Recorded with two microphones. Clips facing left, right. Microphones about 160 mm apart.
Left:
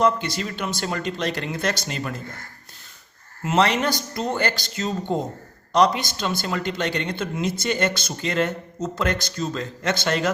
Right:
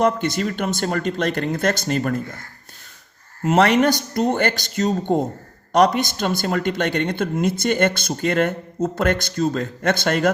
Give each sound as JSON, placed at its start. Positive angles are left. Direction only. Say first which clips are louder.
{"t": 0.0, "sound": "speech", "louder": "right 2 dB", "side_deg": -50}
{"t": 3.4, "sound": "speech", "louder": "right 5 dB", "side_deg": -50}